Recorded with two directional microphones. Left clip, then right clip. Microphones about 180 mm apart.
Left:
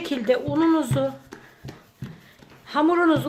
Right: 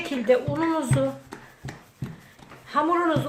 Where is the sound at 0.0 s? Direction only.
50° left (ahead or behind).